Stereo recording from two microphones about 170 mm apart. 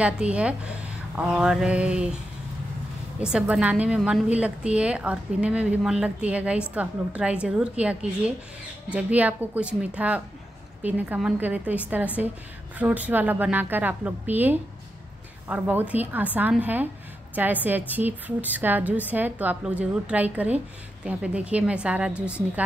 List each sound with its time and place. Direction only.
0.0 s a woman's voice: 5° right (ahead or behind)
3.2 s a woman's voice: 5° right (ahead or behind)